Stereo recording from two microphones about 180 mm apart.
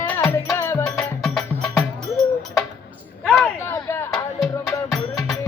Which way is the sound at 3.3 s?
10° left (ahead or behind).